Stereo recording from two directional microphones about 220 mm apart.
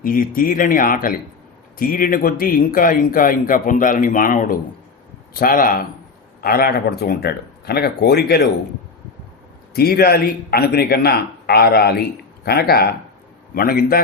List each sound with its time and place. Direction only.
0.0 s a man's voice: 40° left (ahead or behind)
9.7 s a man's voice: 45° left (ahead or behind)